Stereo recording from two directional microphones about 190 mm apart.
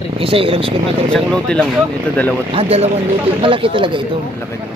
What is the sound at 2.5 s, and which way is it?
Speech, 30° right (ahead or behind).